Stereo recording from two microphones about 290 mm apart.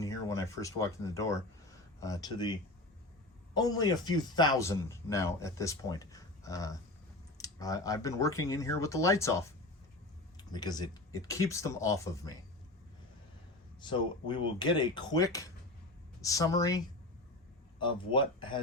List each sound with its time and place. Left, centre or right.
0.0 s speech: centre
13.8 s speech: centre